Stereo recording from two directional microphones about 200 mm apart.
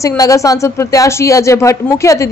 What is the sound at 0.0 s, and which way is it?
Speech, 15° left (ahead or behind).